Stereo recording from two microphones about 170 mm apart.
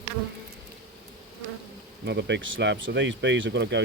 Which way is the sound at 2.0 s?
90° right.